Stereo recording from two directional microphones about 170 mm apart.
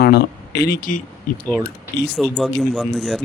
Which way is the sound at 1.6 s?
75° left (ahead or behind).